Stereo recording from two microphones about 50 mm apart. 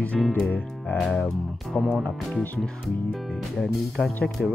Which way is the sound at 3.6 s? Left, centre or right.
Centre.